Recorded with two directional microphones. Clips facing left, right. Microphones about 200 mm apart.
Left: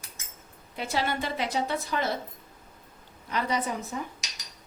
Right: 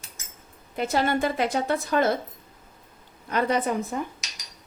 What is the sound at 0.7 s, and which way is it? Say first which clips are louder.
Speech: right 6 dB; 50° right (ahead or behind).